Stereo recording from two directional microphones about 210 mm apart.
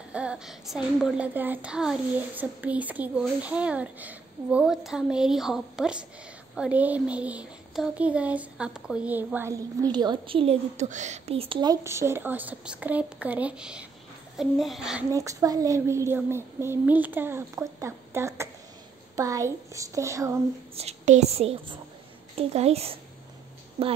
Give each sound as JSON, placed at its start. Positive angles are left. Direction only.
{"t": 0.1, "sound": "a child's voice", "side_deg": -5}
{"t": 15.0, "sound": "a child's voice", "side_deg": -15}
{"t": 20.7, "sound": "a woman's voice", "side_deg": -30}